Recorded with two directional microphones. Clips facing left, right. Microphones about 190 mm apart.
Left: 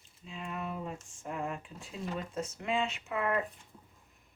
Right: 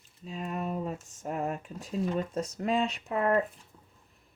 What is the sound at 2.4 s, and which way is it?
Speech, 40° right (ahead or behind).